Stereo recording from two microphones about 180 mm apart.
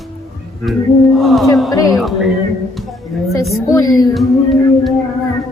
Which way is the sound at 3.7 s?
20° left (ahead or behind).